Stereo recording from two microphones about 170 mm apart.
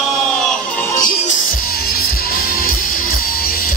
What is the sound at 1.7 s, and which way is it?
Music, 65° left (ahead or behind).